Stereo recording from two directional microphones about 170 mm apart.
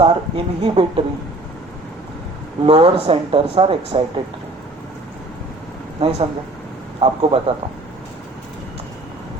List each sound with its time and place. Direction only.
0.0 s speech: 35° right (ahead or behind)
2.6 s speech: 35° right (ahead or behind)
6.0 s speech: 35° right (ahead or behind)